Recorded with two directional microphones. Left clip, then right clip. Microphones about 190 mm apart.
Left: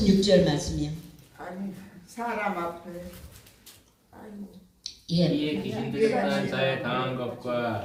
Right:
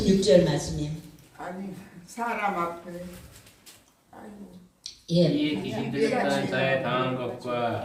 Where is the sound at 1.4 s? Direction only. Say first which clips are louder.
Right 1 dB; 20° right (ahead or behind).